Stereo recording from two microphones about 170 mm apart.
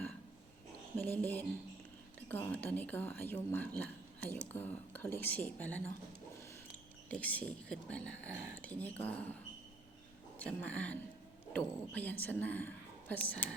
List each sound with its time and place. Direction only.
0.9 s speech: 10° left (ahead or behind)
7.1 s speech: 10° left (ahead or behind)
10.3 s a woman's voice: 10° left (ahead or behind)